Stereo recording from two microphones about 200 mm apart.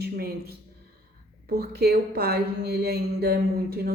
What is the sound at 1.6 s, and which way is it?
A woman's voice, 50° right (ahead or behind).